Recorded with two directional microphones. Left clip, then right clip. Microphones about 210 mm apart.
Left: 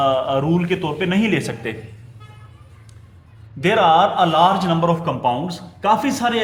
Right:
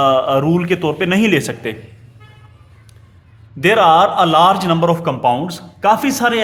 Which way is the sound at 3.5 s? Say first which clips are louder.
Right 4 dB; 40° right (ahead or behind).